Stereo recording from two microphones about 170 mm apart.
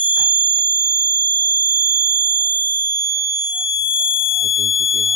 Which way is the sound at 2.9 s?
15° right (ahead or behind).